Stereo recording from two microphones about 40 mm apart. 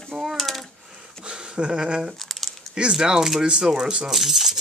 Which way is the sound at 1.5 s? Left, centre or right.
Right.